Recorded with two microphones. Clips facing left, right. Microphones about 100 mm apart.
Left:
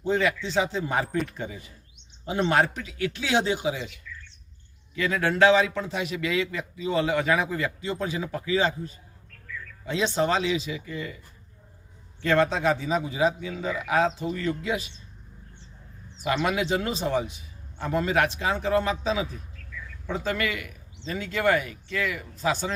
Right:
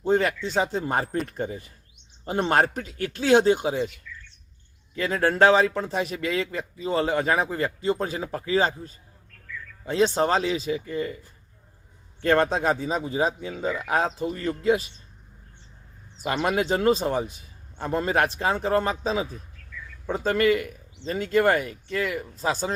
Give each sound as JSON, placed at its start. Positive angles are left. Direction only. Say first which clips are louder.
{"t": 0.0, "sound": "a man's voice", "louder": "right 2 dB", "side_deg": -45}
{"t": 4.9, "sound": "a man's voice", "louder": "right 2 dB", "side_deg": -40}
{"t": 12.2, "sound": "a man's voice", "louder": "right 1 dB", "side_deg": -45}
{"t": 16.2, "sound": "a man's voice", "louder": "right 1 dB", "side_deg": -40}